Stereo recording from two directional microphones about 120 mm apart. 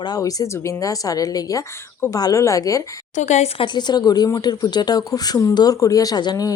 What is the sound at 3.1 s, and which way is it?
Speech, 75° left (ahead or behind).